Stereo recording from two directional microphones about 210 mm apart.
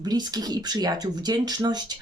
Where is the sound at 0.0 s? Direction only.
20° right (ahead or behind).